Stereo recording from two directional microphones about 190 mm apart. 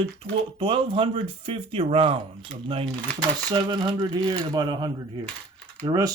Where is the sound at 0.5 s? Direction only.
25° right (ahead or behind).